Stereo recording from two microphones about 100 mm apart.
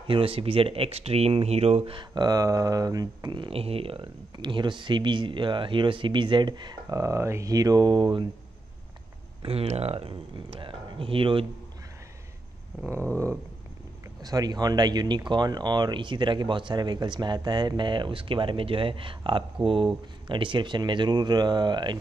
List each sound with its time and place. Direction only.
0.0 s speech: 60° right (ahead or behind); by 1.8 s 90° right
1.9 s speech: 50° right (ahead or behind)
3.4 s speech: 75° right (ahead or behind); by 7.0 s 45° right (ahead or behind)
7.0 s speech: 30° right (ahead or behind); by 8.3 s 50° right (ahead or behind)
9.4 s speech: 80° right; by 11.4 s 65° right (ahead or behind)
14.2 s speech: 40° right (ahead or behind)